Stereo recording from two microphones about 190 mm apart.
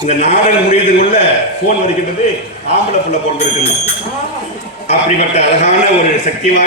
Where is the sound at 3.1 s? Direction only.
40° left (ahead or behind).